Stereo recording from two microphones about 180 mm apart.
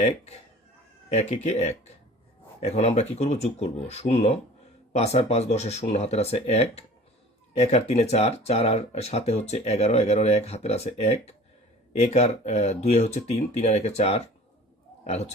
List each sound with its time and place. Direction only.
1.1 s a man's voice: 35° left (ahead or behind)